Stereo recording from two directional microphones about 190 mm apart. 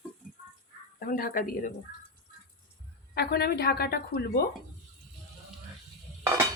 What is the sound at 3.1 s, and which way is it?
Speech, 55° left (ahead or behind).